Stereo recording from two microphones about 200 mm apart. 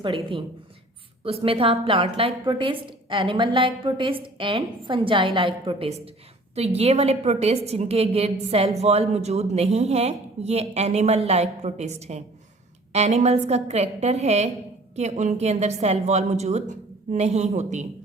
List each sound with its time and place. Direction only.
0.0 s a woman's voice: 25° right (ahead or behind)